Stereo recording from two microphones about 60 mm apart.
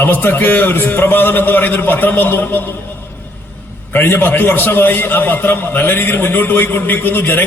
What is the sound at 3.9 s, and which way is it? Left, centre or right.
A man's voice, left.